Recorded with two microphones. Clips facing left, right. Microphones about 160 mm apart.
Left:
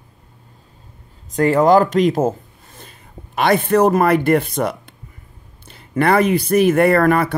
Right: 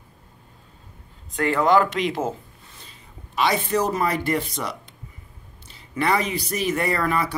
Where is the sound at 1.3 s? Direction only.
40° left (ahead or behind).